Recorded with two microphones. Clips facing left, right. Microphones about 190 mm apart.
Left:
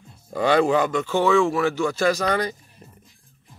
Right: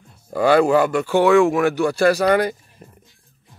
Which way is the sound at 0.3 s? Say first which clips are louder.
Right 4 dB; 5° right (ahead or behind).